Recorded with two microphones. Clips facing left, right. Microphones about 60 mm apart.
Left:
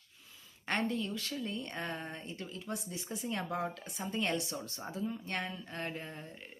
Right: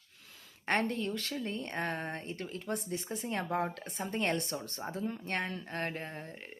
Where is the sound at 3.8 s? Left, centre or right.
Right.